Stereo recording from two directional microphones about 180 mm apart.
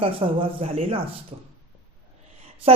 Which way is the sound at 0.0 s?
30° right (ahead or behind).